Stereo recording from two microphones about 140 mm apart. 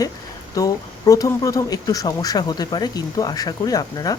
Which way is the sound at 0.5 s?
25° left (ahead or behind).